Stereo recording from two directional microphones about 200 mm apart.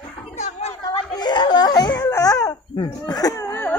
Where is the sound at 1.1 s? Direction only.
20° left (ahead or behind).